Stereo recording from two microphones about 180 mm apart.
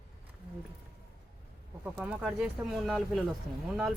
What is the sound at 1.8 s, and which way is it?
Speech, 5° right (ahead or behind).